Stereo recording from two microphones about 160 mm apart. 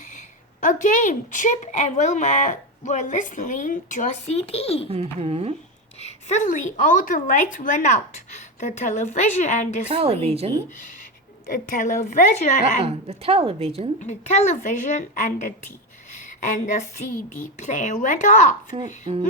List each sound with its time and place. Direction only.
0.2 s a woman's voice: 50° left (ahead or behind)
4.9 s a woman's voice: 40° right (ahead or behind)
6.0 s a woman's voice: 45° left (ahead or behind)
9.9 s a woman's voice: 40° right (ahead or behind)
11.4 s a woman's voice: 55° left (ahead or behind)
12.8 s a woman's voice: 35° right (ahead or behind)
14.0 s a woman's voice: 45° left (ahead or behind)
16.1 s a sound: 50° left (ahead or behind)
17.2 s a woman's voice: 50° left (ahead or behind)
18.7 s a woman's voice: 35° right (ahead or behind)